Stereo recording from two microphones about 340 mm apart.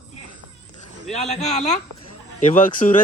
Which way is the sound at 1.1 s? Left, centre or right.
Centre.